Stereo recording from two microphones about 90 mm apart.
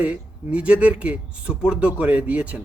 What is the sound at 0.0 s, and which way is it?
Speech, 15° right (ahead or behind).